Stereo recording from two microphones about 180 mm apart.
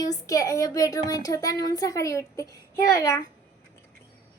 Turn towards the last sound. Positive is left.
turn(degrees=15)  # may be behind; listen again after turning